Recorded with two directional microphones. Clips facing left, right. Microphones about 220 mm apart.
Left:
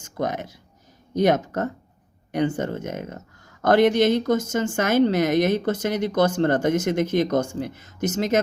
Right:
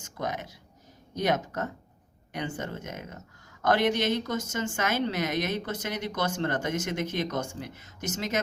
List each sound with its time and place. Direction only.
0.2 s speech: 45° left (ahead or behind)